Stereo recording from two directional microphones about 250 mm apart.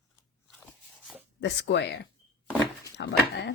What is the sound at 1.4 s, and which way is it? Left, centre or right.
Speech, left.